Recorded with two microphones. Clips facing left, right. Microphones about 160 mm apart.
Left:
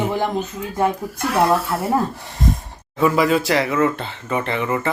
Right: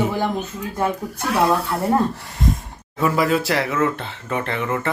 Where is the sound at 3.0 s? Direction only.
Centre (ahead or behind).